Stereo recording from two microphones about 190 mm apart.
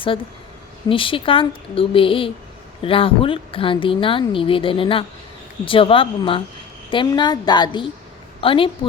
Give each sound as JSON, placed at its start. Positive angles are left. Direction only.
{"t": 0.9, "sound": "speech", "side_deg": 25}